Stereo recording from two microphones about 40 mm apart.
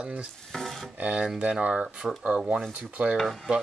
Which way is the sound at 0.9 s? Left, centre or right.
Right.